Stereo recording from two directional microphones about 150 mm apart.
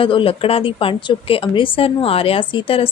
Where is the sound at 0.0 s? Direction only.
35° left (ahead or behind).